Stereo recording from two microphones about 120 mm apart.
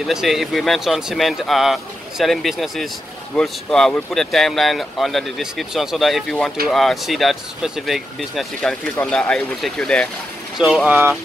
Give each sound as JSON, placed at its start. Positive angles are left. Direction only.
{"t": 0.0, "sound": "speech", "side_deg": 0}
{"t": 10.9, "sound": "speech", "side_deg": -15}